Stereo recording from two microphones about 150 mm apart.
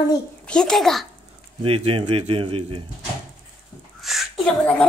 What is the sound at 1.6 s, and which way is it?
Speech, 40° right (ahead or behind).